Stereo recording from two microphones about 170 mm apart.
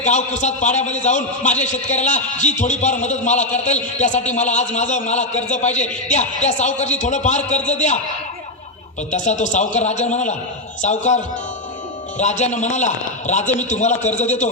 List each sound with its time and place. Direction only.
0.0 s a man's voice: 45° left (ahead or behind)
9.1 s a man's voice: 45° left (ahead or behind)